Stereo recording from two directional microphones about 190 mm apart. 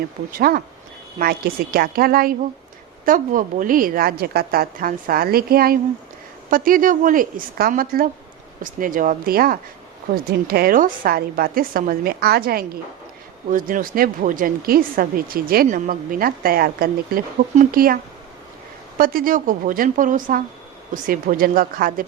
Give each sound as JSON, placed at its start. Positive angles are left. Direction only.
{"t": 0.3, "sound": "speech", "side_deg": -50}